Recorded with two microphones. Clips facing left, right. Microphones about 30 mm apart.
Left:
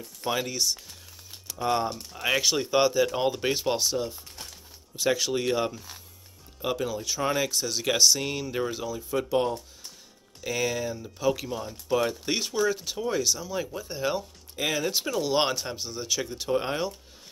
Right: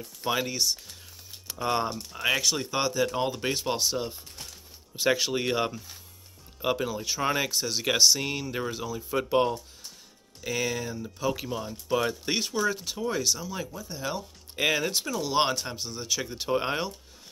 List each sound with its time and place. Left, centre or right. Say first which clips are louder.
0.2 s speech: even; centre
2.4 s speech: left 4 dB; centre
4.9 s speech: even; centre
9.1 s speech: right 1 dB; centre
10.4 s speech: left 2 dB; centre
13.7 s speech: left 4 dB; left
14.6 s speech: right 2 dB; centre
15.1 s speech: even; centre
16.3 s speech: even; centre